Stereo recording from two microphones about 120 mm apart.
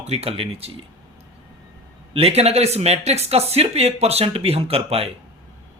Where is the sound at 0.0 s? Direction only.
60° right (ahead or behind).